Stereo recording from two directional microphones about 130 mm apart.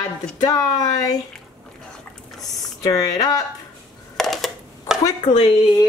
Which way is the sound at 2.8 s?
30° left (ahead or behind).